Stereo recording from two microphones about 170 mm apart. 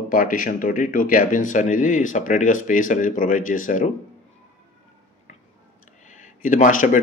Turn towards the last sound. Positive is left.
turn(degrees=50)  # may be behind; listen again after turning